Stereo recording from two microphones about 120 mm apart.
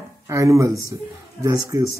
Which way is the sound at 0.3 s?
25° right (ahead or behind).